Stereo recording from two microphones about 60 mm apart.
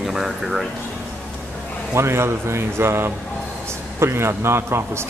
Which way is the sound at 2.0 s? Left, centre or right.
Right.